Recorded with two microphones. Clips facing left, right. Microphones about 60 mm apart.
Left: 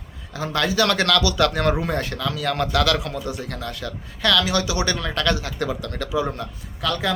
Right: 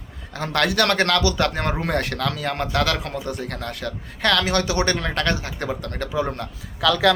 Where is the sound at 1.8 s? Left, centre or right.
Right.